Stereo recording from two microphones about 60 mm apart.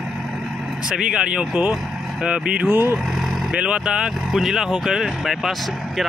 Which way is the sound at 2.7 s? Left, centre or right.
Right.